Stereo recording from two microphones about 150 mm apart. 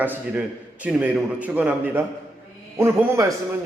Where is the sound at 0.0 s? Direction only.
10° right (ahead or behind).